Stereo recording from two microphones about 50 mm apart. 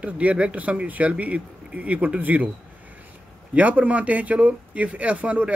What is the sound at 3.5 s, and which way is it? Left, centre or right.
Speech, right.